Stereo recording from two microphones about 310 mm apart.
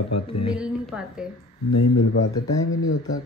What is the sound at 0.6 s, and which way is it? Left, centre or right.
Speech, centre.